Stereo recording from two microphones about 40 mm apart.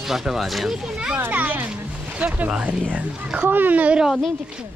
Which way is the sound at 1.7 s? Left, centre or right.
Right.